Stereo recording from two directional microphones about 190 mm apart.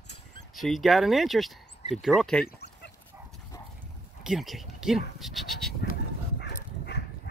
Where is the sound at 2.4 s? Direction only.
60° left (ahead or behind).